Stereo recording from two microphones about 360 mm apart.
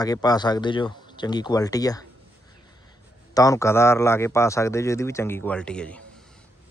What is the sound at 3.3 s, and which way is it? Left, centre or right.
Speech, centre.